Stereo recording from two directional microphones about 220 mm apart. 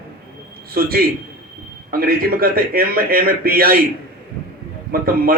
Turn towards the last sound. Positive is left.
turn(degrees=-45)  # may be behind; listen again after turning